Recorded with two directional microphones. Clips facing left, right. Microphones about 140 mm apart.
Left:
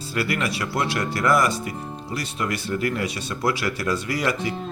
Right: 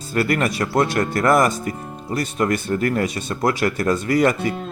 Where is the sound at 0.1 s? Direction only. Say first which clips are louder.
Right 5 dB; 50° right (ahead or behind).